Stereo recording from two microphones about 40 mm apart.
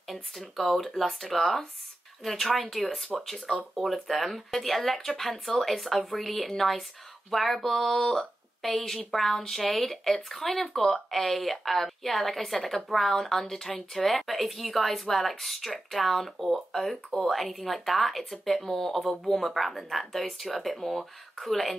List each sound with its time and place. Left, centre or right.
0.6 s speech: centre